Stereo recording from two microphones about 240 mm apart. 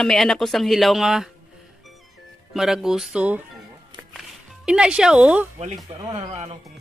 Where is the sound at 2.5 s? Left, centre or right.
Centre.